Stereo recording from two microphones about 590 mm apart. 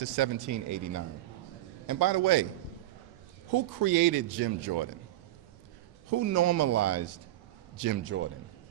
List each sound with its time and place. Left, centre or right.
0.0 s a man's voice: right
3.5 s a man's voice: right
6.1 s a man's voice: right